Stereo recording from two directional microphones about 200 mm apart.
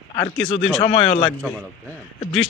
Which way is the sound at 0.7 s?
25° left (ahead or behind).